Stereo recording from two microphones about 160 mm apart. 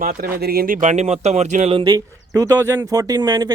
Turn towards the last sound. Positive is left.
turn(degrees=-25)  # may be behind; listen again after turning